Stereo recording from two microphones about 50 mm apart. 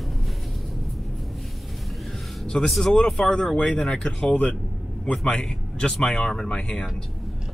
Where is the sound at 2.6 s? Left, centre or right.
Centre.